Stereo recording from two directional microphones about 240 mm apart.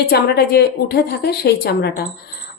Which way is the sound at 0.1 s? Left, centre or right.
Left.